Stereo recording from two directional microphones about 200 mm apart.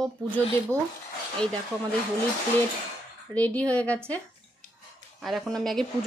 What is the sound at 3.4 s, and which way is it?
Speech, 5° left (ahead or behind).